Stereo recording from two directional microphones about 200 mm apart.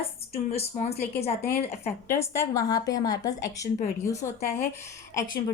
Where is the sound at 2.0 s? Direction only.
15° left (ahead or behind).